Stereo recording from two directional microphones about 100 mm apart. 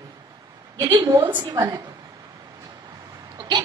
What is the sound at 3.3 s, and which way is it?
Hiccup, 50° right (ahead or behind).